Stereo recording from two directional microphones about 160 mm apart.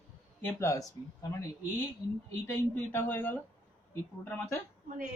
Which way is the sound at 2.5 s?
15° left (ahead or behind).